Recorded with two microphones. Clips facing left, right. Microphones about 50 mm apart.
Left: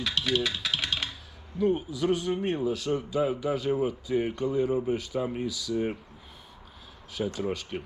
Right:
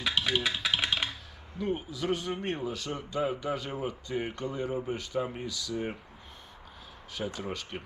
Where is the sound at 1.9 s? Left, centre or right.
Centre.